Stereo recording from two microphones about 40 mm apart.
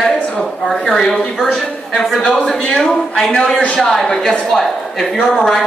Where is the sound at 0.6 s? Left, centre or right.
Centre.